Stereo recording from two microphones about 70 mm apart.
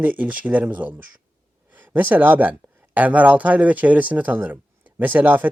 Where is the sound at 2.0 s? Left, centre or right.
Right.